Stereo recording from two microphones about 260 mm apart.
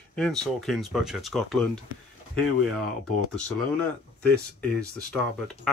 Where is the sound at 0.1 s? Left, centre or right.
Centre.